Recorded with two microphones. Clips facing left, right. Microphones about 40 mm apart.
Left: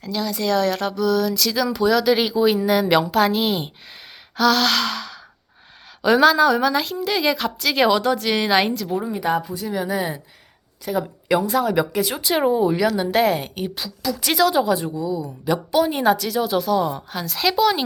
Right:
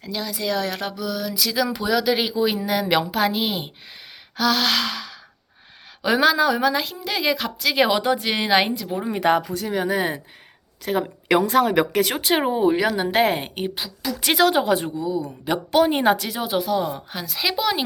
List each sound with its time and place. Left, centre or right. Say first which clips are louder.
0.0 s speech: left 3 dB; centre
7.9 s speech: left 2 dB; centre
9.0 s speech: right 6 dB; right
9.8 s a woman's voice: right 1 dB; right
12.2 s a woman's voice: left 3 dB; right
16.8 s speech: left 3 dB; centre